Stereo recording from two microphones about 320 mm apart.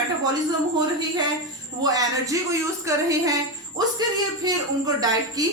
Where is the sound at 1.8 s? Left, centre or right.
Centre.